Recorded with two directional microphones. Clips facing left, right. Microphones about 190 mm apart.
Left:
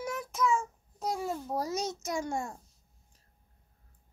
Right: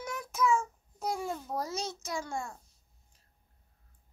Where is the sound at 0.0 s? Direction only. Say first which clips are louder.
Even; centre (ahead or behind).